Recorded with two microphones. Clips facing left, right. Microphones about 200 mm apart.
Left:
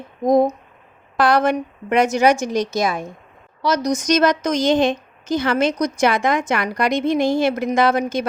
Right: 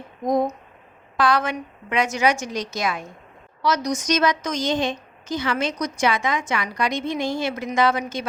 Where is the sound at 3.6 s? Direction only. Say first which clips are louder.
Left 3 dB; 35° left (ahead or behind).